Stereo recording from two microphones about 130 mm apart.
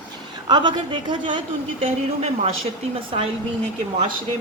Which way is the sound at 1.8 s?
50° right (ahead or behind).